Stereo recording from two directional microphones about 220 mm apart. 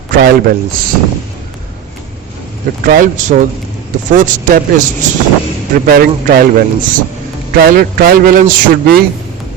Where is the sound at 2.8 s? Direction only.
40° right (ahead or behind).